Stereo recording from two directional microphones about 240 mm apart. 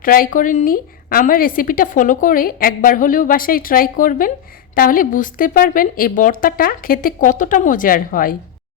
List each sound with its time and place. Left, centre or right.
0.0 s a woman's voice: left